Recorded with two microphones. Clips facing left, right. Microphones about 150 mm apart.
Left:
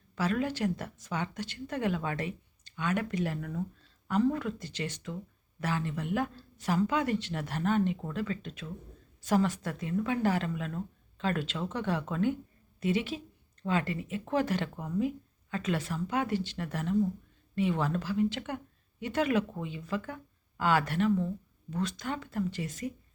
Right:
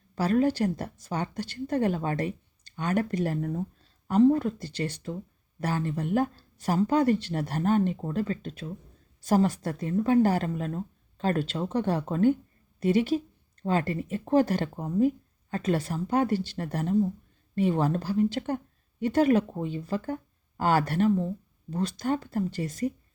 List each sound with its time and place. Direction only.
0.2 s a woman's voice: 40° right (ahead or behind)